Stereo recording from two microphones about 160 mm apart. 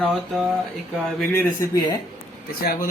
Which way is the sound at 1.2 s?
15° left (ahead or behind).